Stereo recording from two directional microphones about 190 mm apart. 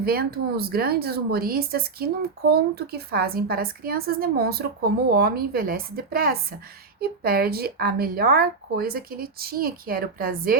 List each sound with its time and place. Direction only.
0.0 s a woman's voice: 55° right (ahead or behind)